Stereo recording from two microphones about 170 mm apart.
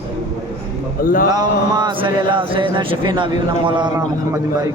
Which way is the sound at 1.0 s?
55° left (ahead or behind).